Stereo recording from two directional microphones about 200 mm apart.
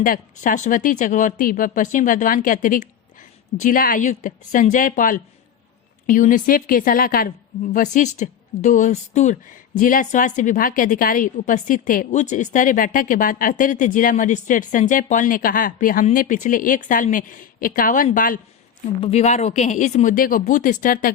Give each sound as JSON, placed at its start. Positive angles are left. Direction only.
{"t": 0.0, "sound": "a woman's voice", "side_deg": 40}
{"t": 19.0, "sound": "a woman's voice", "side_deg": 35}